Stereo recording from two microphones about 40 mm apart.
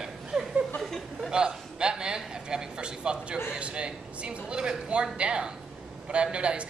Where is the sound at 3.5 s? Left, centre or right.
Right.